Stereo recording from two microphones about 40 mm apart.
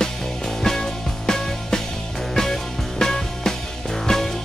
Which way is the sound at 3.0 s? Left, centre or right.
Centre.